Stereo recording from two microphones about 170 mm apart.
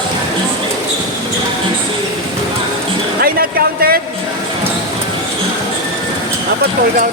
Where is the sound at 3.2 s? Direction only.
60° right (ahead or behind).